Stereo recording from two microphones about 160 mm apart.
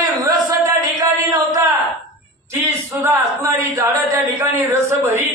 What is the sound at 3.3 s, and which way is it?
Speech, 20° right (ahead or behind).